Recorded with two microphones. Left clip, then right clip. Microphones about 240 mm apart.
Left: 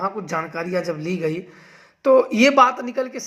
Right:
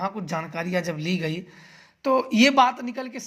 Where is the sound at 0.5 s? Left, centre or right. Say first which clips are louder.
Left 3 dB; right.